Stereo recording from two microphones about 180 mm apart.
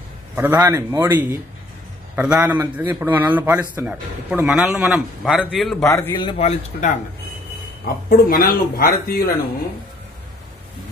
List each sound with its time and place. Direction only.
0.4 s a man's voice: 10° right (ahead or behind)
5.9 s a man's voice: 15° left (ahead or behind)
6.1 s speech: 30° left (ahead or behind)
7.8 s speech: 55° left (ahead or behind)